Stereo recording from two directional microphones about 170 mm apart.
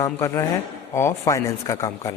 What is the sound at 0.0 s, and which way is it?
Speech, 15° left (ahead or behind).